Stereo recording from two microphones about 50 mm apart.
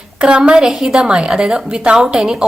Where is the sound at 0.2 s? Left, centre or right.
Centre.